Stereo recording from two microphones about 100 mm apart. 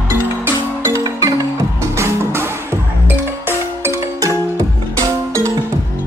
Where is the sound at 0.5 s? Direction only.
30° right (ahead or behind).